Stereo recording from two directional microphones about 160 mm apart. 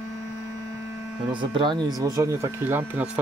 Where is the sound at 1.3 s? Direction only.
30° right (ahead or behind).